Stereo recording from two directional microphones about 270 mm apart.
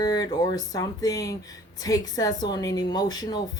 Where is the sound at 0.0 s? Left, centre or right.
Centre.